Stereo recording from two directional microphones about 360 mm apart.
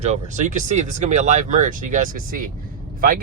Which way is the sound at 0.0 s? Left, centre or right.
Centre.